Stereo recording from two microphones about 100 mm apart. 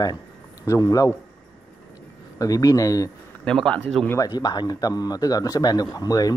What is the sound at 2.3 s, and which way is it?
Speech, 35° left (ahead or behind).